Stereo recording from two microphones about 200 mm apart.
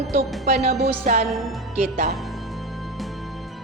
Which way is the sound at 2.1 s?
Centre (ahead or behind).